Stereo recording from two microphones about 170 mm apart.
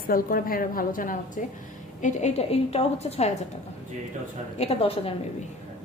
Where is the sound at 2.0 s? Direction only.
40° left (ahead or behind).